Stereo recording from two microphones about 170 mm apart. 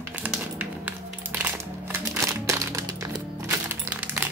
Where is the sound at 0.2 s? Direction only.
10° right (ahead or behind).